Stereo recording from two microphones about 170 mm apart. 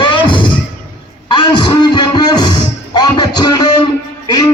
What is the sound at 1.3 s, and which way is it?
Music, 25° left (ahead or behind).